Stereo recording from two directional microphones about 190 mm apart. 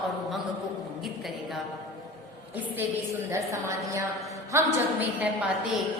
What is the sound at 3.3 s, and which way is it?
A woman's voice, 15° right (ahead or behind).